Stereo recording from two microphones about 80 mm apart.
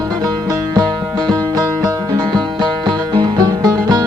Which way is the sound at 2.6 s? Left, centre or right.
Right.